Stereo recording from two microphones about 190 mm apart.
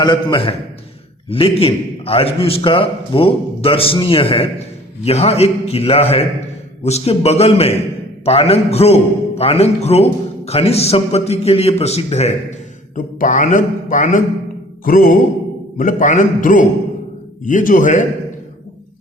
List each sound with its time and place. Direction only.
0.0 s a man's voice: 25° left (ahead or behind); by 18.0 s 45° left (ahead or behind)